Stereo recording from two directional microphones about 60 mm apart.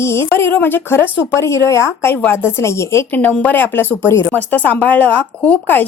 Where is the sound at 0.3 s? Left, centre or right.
Left.